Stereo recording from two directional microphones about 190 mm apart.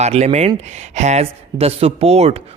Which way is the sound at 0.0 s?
35° right (ahead or behind).